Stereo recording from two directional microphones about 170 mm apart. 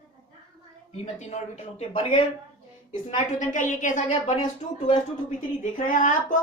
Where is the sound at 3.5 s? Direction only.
50° left (ahead or behind).